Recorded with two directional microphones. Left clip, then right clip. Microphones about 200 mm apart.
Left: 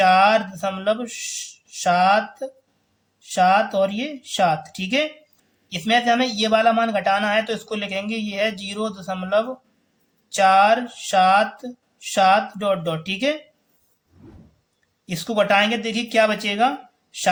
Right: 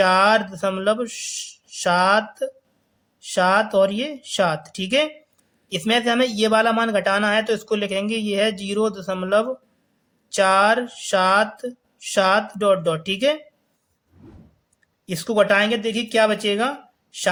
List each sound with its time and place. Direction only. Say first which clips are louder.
0.0 s speech: left 1 dB; 25° right (ahead or behind)
14.2 s power windows: even; centre (ahead or behind)
15.1 s speech: right 1 dB; 25° right (ahead or behind)